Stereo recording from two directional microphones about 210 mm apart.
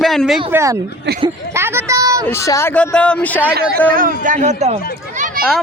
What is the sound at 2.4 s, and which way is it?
Speech, 15° left (ahead or behind).